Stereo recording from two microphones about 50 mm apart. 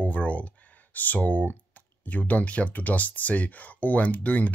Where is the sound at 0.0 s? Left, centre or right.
Left.